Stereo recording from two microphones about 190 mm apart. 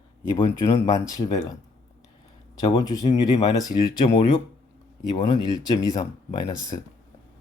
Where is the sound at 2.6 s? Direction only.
20° left (ahead or behind).